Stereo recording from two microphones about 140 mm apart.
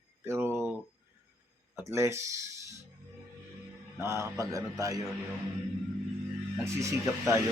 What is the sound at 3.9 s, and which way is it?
A man's voice, 20° right (ahead or behind).